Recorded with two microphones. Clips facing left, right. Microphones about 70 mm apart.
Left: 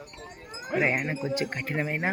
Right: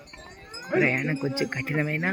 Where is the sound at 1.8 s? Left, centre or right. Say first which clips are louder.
Right 1 dB; centre.